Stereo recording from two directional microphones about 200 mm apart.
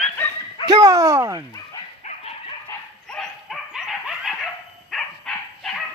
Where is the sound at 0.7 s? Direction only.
20° right (ahead or behind).